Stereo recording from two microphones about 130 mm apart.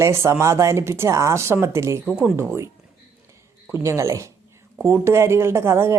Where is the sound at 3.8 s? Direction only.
20° right (ahead or behind).